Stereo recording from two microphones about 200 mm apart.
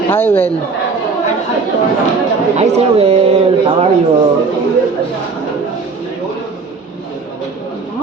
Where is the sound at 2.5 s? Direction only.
30° right (ahead or behind).